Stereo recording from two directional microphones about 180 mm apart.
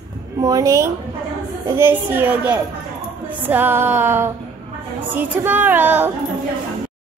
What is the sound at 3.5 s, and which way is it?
A child's voice, 10° right (ahead or behind).